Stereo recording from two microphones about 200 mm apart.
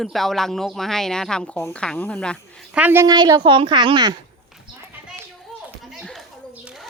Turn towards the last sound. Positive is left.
turn(degrees=-5)  # may be behind; listen again after turning